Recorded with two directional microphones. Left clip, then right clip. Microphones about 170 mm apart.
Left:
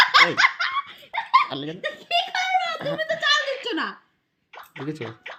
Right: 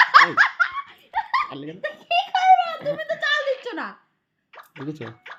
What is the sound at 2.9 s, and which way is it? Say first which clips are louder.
Speech: left 1 dB; 5° right (ahead or behind).